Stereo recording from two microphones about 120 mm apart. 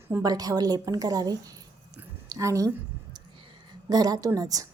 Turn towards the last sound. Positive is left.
turn(degrees=-30)  # may be behind; listen again after turning